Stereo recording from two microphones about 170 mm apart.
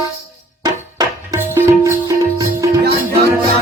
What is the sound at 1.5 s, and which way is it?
Music, 15° right (ahead or behind).